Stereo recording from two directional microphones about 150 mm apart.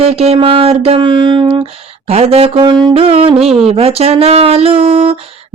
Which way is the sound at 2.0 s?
45° right (ahead or behind).